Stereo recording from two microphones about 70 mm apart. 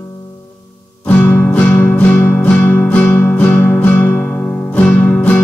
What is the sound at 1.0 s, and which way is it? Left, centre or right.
Music, left.